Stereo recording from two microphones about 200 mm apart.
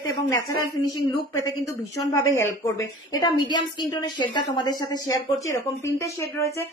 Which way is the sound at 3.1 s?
20° left (ahead or behind).